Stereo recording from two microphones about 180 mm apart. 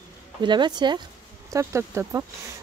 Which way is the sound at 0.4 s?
25° right (ahead or behind).